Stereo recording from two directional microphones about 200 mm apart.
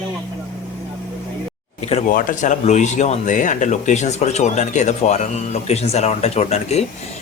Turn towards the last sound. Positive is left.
turn(degrees=35)  # may be behind; listen again after turning